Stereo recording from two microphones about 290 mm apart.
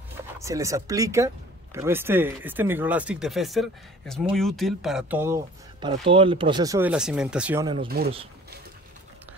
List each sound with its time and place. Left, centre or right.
0.4 s speech: centre
7.6 s speech: centre